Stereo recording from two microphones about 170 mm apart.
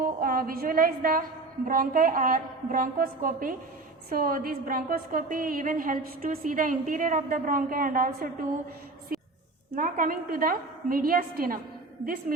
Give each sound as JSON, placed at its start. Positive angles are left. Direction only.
{"t": 0.0, "sound": "a woman's voice", "side_deg": -55}
{"t": 9.1, "sound": "music", "side_deg": -55}
{"t": 9.7, "sound": "a woman's voice", "side_deg": -55}